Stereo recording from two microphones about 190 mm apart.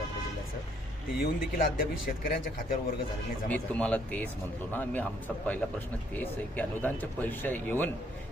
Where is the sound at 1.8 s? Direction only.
45° left (ahead or behind).